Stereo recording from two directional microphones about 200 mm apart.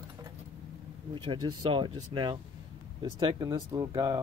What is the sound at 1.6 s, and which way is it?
Speech, 25° right (ahead or behind).